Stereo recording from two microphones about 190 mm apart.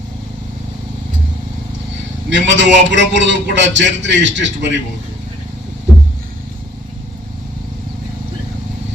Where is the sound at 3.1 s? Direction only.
70° right (ahead or behind).